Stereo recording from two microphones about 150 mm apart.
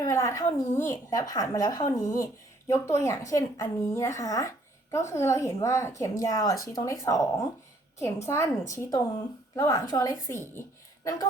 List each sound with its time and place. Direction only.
0.0 s speech: 20° left (ahead or behind)